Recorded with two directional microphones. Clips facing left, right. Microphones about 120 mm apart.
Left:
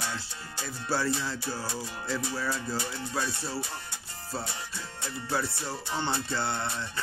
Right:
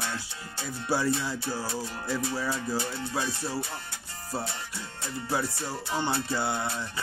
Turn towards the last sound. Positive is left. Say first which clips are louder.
# right 2 dB
turn(degrees=-10)  # may be behind; listen again after turning